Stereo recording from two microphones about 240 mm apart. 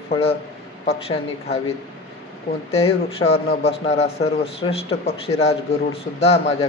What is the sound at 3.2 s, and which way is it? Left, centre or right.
A man's voice, left.